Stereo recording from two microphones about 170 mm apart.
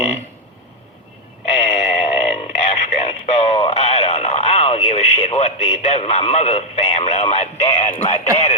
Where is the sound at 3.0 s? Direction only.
30° left (ahead or behind).